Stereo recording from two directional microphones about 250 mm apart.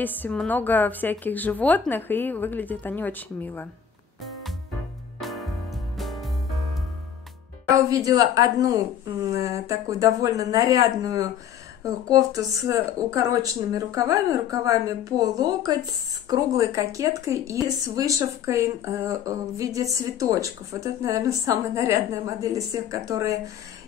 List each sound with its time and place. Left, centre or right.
0.0 s a woman's voice: centre
5.2 s music: centre
7.7 s speech: centre